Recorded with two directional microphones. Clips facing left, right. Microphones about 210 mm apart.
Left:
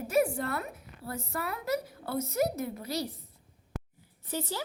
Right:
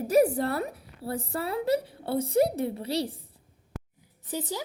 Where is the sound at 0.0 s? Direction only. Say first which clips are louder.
Right 5 dB; 35° right (ahead or behind).